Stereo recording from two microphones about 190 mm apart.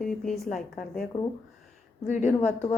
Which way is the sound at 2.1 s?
40° left (ahead or behind).